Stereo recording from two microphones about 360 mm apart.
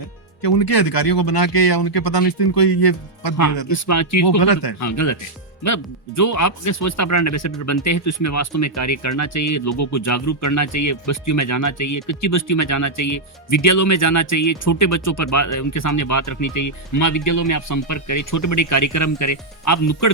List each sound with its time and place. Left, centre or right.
0.4 s speech: left
3.3 s speech: left
4.4 s speech: left
4.8 s speech: left